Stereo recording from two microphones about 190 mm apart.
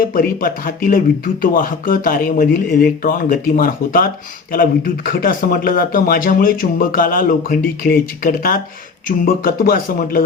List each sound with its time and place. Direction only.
0.0 s a man's voice: 50° left (ahead or behind)